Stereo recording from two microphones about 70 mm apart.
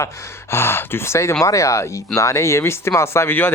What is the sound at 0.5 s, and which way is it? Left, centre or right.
Speech, left.